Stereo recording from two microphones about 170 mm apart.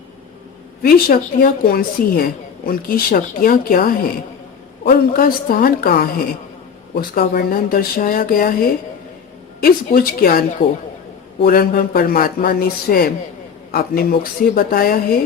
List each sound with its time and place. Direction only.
0.8 s a woman's voice: 60° left (ahead or behind)
11.4 s a woman's voice: 60° left (ahead or behind)